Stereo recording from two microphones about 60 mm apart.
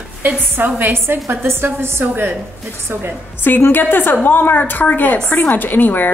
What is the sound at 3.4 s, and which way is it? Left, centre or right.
A woman's voice, left.